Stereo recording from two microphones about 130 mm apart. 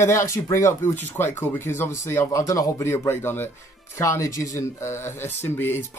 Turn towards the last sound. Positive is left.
turn(degrees=15)  # may be behind; listen again after turning